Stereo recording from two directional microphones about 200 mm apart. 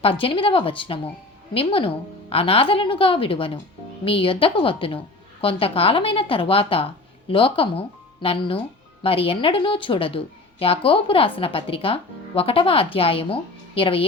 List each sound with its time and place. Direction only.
0.0 s a woman's voice: 25° left (ahead or behind)